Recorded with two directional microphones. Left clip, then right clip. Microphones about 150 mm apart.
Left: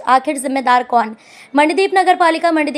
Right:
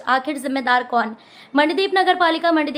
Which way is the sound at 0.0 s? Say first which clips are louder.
Left 6 dB; 40° left (ahead or behind).